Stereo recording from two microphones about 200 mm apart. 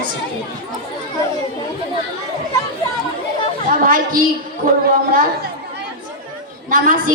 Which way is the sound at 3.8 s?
45° right (ahead or behind).